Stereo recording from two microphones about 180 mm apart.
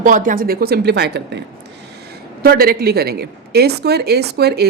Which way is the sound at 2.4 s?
60° right (ahead or behind).